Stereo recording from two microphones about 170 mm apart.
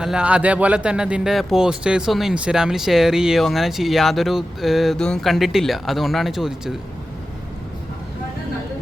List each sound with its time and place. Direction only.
0.0 s a man's voice: 5° right (ahead or behind)